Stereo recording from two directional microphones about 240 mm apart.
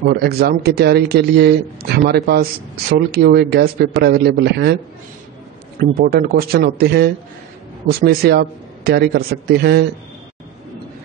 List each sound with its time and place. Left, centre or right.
0.0 s speech: right
5.8 s speech: right